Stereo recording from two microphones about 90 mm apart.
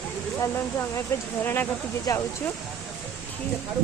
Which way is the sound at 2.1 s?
40° left (ahead or behind).